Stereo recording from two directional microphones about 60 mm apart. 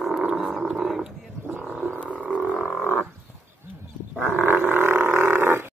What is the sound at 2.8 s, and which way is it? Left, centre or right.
Frog, left.